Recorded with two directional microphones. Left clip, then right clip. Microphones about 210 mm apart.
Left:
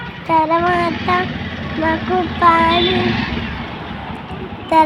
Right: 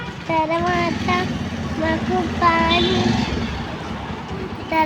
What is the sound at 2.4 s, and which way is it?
Child singing, 10° left (ahead or behind).